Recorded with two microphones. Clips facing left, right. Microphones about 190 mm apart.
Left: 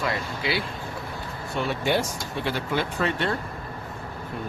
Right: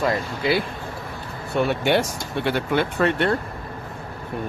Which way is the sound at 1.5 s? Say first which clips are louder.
Right 5 dB; 65° right (ahead or behind).